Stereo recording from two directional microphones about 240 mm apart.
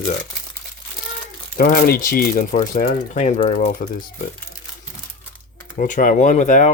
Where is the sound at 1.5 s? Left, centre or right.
Left.